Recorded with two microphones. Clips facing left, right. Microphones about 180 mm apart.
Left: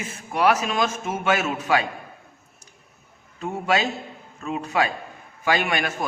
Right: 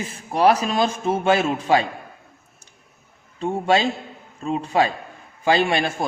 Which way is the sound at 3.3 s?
30° right (ahead or behind).